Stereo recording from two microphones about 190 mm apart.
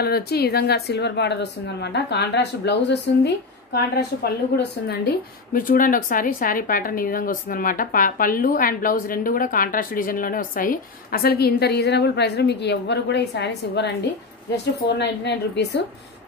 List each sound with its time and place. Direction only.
0.0 s a woman's voice: 55° left (ahead or behind)